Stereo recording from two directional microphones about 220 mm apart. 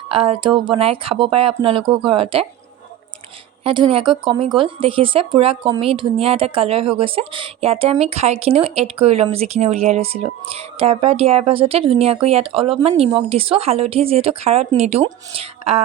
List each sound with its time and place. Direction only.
0.1 s speech: 25° right (ahead or behind)
3.6 s speech: 25° right (ahead or behind)